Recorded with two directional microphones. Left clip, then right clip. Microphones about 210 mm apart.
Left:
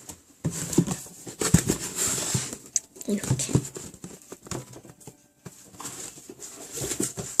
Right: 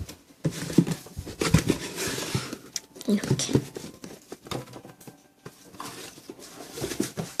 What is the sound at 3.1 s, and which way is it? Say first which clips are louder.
Speech: right 3 dB; 10° right (ahead or behind).